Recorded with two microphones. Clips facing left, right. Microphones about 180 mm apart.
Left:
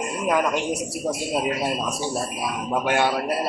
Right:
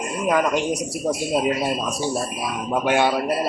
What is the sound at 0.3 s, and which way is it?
Speech, centre (ahead or behind).